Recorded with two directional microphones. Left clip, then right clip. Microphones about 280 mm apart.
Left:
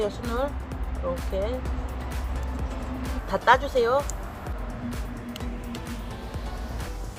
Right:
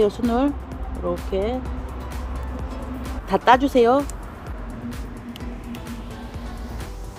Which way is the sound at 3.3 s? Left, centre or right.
Right.